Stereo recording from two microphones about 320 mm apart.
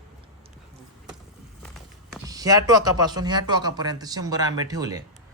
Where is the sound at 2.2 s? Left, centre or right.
Centre.